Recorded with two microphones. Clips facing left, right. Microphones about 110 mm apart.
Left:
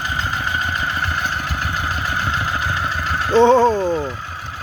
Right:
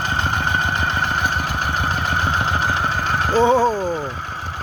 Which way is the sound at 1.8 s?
40° right (ahead or behind).